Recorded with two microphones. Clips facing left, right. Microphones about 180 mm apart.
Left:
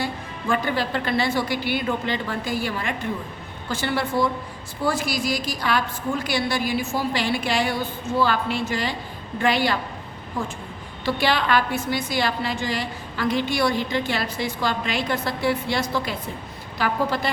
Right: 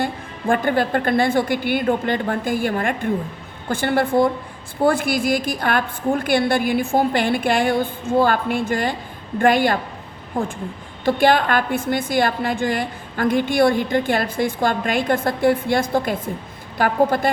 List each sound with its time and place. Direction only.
0.0 s a woman's voice: 50° right (ahead or behind)